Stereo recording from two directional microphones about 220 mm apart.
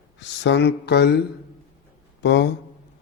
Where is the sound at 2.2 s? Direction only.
55° left (ahead or behind).